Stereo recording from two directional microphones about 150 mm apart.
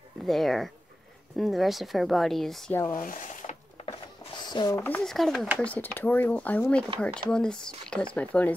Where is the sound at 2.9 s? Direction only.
60° left (ahead or behind).